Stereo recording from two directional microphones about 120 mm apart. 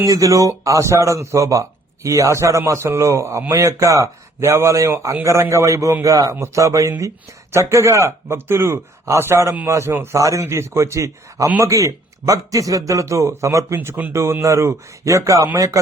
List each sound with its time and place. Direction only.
0.0 s a man's voice: 30° right (ahead or behind)